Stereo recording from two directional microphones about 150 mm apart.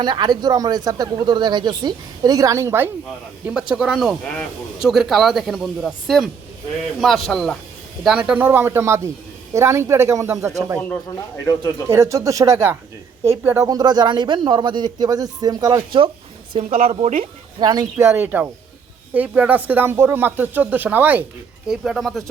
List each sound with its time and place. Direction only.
0.0 s speech: 30° right (ahead or behind)
11.9 s speech: 20° right (ahead or behind)
13.7 s speech: 25° right (ahead or behind)
16.9 s speech: 50° right (ahead or behind)
17.6 s speech: 30° right (ahead or behind)
17.9 s speech: 15° right (ahead or behind); by 22.2 s centre (ahead or behind)